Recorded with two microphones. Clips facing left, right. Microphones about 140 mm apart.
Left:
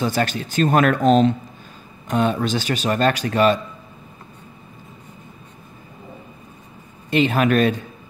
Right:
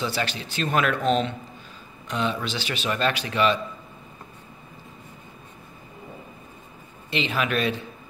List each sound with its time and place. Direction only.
0.0 s a man's voice: 45° left (ahead or behind)
7.1 s a man's voice: 45° left (ahead or behind)